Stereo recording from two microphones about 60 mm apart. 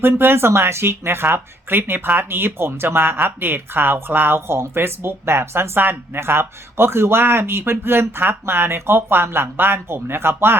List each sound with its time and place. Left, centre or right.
0.0 s speech: right